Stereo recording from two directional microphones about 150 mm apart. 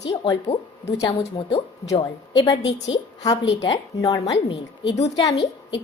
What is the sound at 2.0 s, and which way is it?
Speech, 25° left (ahead or behind).